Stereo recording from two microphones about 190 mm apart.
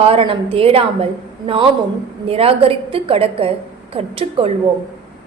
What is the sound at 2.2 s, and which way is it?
A woman's voice, 30° right (ahead or behind).